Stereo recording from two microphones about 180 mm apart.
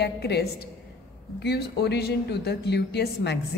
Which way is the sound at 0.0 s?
65° left (ahead or behind).